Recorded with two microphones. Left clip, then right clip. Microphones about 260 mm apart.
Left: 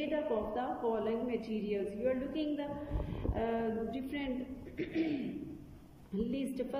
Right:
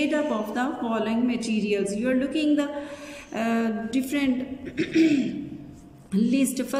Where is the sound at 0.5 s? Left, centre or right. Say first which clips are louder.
Right 8 dB; right.